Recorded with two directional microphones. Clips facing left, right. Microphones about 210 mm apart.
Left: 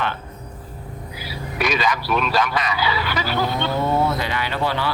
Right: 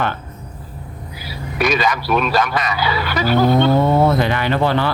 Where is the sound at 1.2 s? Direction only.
45° right (ahead or behind).